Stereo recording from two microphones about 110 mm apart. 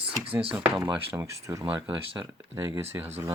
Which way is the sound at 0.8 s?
20° right (ahead or behind).